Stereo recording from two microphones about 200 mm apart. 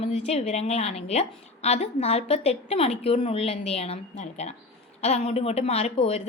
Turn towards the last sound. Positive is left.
turn(degrees=30)  # may be behind; listen again after turning